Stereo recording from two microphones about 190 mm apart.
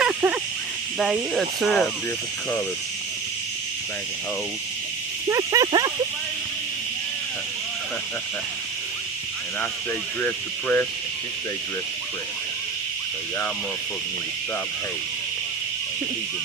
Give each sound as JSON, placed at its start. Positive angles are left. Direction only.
{"t": 0.0, "sound": "dog", "side_deg": -10}
{"t": 0.9, "sound": "speech", "side_deg": 0}
{"t": 5.3, "sound": "speech", "side_deg": -20}
{"t": 10.2, "sound": "speech", "side_deg": 10}